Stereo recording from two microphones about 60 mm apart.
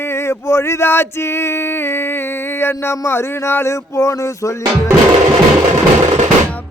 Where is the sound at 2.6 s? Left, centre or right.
Left.